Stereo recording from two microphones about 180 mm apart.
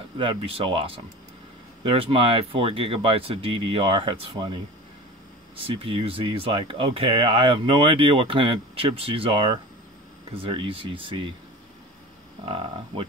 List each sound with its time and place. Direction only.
0.2 s speech: 30° right (ahead or behind)
5.6 s speech: 30° right (ahead or behind)
12.4 s speech: 30° right (ahead or behind)